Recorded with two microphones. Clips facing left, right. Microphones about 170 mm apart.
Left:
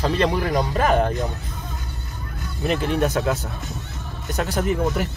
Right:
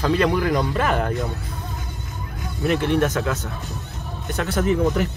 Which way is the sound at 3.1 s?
35° left (ahead or behind).